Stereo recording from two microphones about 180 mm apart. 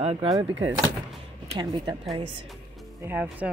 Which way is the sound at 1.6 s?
25° right (ahead or behind).